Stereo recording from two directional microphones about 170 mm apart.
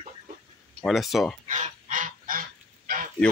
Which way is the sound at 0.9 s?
Centre (ahead or behind).